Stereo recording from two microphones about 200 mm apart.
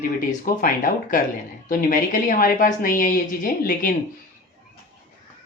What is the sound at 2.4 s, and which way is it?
Speech, 45° left (ahead or behind).